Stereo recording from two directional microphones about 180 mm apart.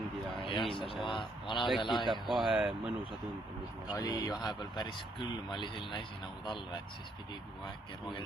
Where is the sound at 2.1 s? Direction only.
Centre (ahead or behind).